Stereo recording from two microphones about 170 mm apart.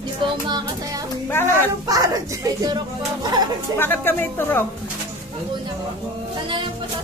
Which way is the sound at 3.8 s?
10° left (ahead or behind).